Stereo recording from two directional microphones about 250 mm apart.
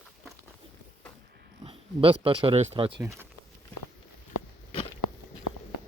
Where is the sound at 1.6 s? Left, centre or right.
Right.